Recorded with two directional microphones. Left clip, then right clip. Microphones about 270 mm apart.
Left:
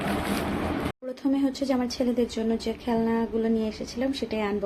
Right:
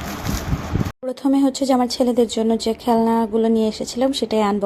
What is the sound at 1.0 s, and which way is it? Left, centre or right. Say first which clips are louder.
Speech: right 10 dB; right.